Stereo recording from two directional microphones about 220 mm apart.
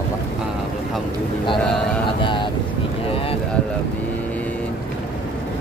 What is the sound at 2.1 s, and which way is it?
Speech, 20° left (ahead or behind).